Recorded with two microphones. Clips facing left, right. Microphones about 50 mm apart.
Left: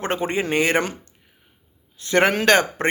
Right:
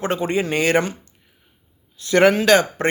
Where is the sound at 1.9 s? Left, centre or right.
Left.